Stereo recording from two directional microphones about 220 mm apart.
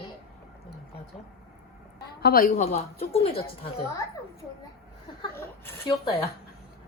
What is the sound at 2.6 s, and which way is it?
A woman's voice, 25° left (ahead or behind).